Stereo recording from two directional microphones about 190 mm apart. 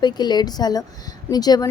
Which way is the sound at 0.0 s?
20° left (ahead or behind).